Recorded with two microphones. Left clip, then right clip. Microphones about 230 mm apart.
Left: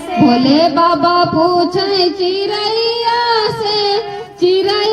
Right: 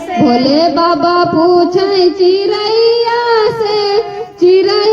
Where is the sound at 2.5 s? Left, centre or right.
Left.